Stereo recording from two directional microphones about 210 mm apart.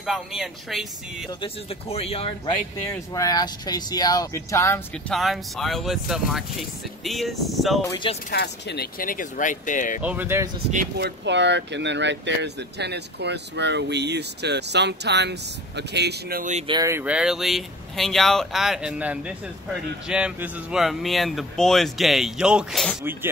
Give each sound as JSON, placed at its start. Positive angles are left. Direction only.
{"t": 0.0, "sound": "speech", "side_deg": 0}
{"t": 1.4, "sound": "speech", "side_deg": 30}
{"t": 5.1, "sound": "speech", "side_deg": 0}
{"t": 7.8, "sound": "speech", "side_deg": 15}
{"t": 8.3, "sound": "speech", "side_deg": 50}
{"t": 10.0, "sound": "speech", "side_deg": -10}
{"t": 10.7, "sound": "speech", "side_deg": -45}
{"t": 16.6, "sound": "speech", "side_deg": -20}